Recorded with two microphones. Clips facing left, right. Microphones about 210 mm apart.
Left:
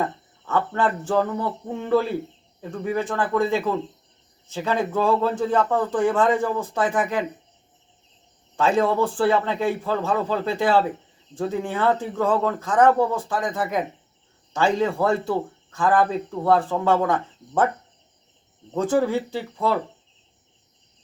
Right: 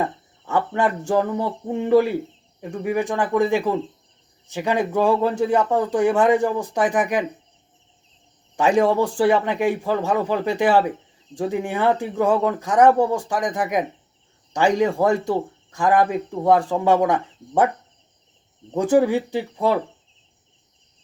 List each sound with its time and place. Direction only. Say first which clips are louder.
0.0 s speech: right 1 dB; 15° right (ahead or behind)
8.5 s speech: right 3 dB; 15° right (ahead or behind)
18.7 s speech: right 4 dB; 15° right (ahead or behind)